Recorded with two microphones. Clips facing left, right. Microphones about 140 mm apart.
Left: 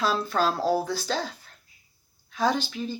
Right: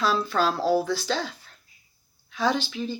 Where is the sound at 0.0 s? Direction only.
45° left (ahead or behind).